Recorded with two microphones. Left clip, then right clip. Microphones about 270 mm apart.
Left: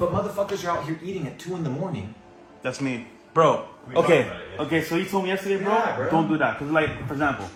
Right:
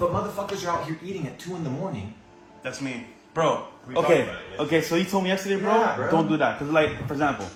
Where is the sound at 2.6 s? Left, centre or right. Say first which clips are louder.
Left 4 dB; left.